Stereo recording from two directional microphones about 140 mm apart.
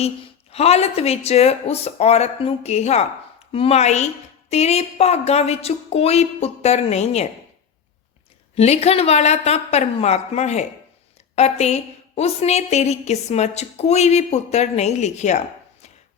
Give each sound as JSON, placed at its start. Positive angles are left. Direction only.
{"t": 0.5, "sound": "a woman's voice", "side_deg": 50}
{"t": 8.5, "sound": "a woman's voice", "side_deg": 50}